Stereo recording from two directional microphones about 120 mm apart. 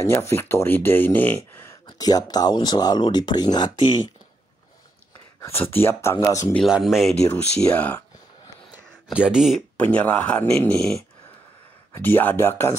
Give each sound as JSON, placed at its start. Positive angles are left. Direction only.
{"t": 0.0, "sound": "speech", "side_deg": 20}
{"t": 1.9, "sound": "speech", "side_deg": 30}
{"t": 5.4, "sound": "speech", "side_deg": 20}
{"t": 6.7, "sound": "speech", "side_deg": 0}
{"t": 7.7, "sound": "speech", "side_deg": 15}
{"t": 8.7, "sound": "a sound", "side_deg": -10}
{"t": 9.8, "sound": "speech", "side_deg": 10}
{"t": 11.9, "sound": "speech", "side_deg": 15}